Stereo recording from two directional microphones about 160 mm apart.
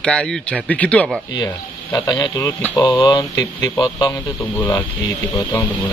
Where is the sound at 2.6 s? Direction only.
10° left (ahead or behind).